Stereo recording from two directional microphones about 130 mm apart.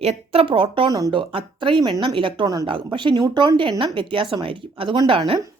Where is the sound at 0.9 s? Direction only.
25° right (ahead or behind).